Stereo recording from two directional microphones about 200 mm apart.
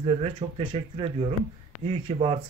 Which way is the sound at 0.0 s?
30° right (ahead or behind).